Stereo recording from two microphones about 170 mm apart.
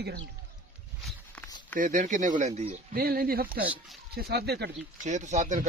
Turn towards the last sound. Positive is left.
turn(degrees=-45)  # may be behind; listen again after turning